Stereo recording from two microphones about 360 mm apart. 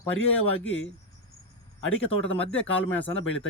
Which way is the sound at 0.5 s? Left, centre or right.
Left.